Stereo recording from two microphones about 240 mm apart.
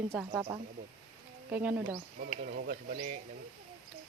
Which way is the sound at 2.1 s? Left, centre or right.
Right.